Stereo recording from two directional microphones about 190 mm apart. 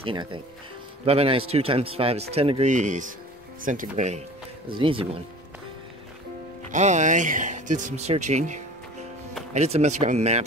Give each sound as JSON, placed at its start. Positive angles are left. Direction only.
{"t": 0.0, "sound": "speech", "side_deg": -25}
{"t": 4.7, "sound": "speech", "side_deg": -30}
{"t": 6.7, "sound": "speech", "side_deg": -40}